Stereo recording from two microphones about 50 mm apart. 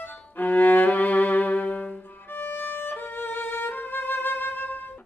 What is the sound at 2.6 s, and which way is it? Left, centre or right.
Music, left.